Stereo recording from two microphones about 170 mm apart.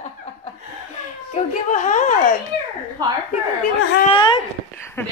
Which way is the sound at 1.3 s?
45° left (ahead or behind).